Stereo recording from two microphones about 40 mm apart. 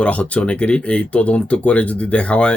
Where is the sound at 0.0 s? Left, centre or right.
Left.